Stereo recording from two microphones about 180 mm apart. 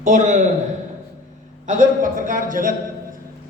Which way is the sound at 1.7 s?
50° right (ahead or behind).